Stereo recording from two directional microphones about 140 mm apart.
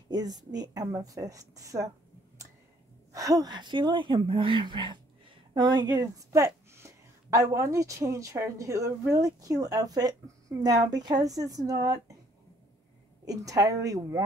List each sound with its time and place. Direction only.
0.1 s a woman's voice: 30° right (ahead or behind)
3.1 s a woman's voice: 25° right (ahead or behind)
13.2 s a woman's voice: 25° right (ahead or behind)